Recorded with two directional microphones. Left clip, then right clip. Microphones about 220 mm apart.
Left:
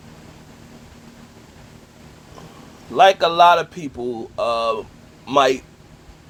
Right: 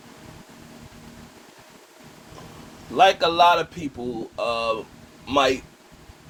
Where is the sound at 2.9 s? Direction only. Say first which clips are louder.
Left 4 dB; 35° left (ahead or behind).